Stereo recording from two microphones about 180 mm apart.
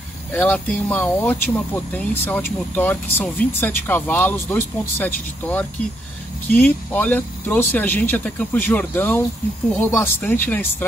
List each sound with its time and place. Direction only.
0.3 s speech: 10° left (ahead or behind)